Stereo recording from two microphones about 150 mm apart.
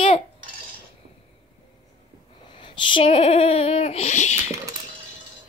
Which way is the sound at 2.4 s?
35° left (ahead or behind).